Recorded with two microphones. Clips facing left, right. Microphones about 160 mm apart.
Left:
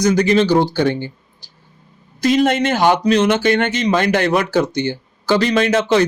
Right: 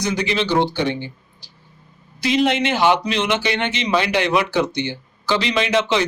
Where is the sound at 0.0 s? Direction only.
45° left (ahead or behind).